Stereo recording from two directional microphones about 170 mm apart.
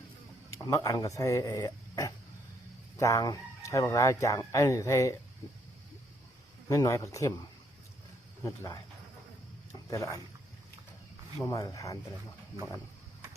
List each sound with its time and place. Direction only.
0.6 s speech: 20° left (ahead or behind)
6.7 s speech: 20° left (ahead or behind)
8.4 s speech: 20° left (ahead or behind)
9.9 s speech: 20° left (ahead or behind)
11.4 s speech: 20° left (ahead or behind)